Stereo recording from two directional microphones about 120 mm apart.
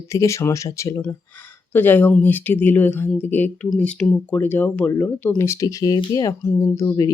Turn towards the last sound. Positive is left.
turn(degrees=25)  # may be behind; listen again after turning